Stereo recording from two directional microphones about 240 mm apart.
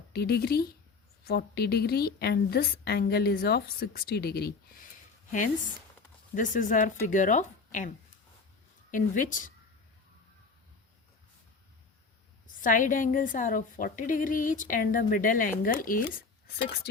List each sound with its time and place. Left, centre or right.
0.1 s a woman's voice: left
6.3 s a woman's voice: left
8.9 s a woman's voice: left
12.6 s a woman's voice: left